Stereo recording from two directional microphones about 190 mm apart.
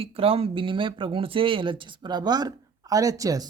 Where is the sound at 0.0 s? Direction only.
30° right (ahead or behind).